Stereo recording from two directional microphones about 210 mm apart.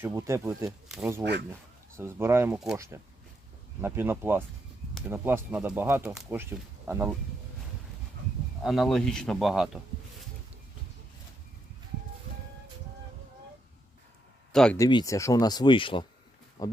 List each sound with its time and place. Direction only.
0.0 s speech: 10° right (ahead or behind)
1.2 s speech: 55° right (ahead or behind)
2.0 s speech: 10° right (ahead or behind)
8.6 s speech: centre (ahead or behind)
14.5 s speech: 5° left (ahead or behind)
14.8 s speech: 20° left (ahead or behind)